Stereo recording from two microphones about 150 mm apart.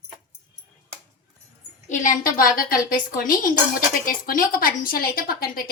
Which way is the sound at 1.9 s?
60° left (ahead or behind).